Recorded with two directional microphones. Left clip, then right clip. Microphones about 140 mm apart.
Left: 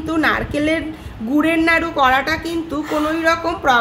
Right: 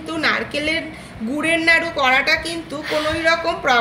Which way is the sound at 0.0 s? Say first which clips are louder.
Left 2 dB; 85° left.